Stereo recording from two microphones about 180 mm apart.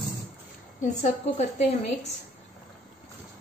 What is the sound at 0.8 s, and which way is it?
A woman's voice, 40° left (ahead or behind).